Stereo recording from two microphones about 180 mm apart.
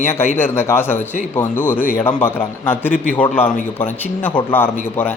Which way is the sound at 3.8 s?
10° left (ahead or behind).